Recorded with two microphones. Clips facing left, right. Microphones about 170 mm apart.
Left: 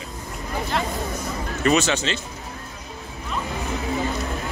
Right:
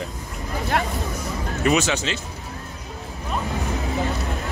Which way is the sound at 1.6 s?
10° right (ahead or behind).